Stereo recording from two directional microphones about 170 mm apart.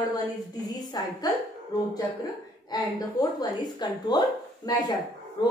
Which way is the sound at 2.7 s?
20° left (ahead or behind).